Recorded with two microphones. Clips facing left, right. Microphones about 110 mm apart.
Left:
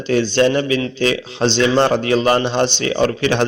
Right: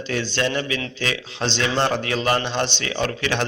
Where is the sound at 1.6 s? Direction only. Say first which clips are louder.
Left 7 dB; 40° left (ahead or behind).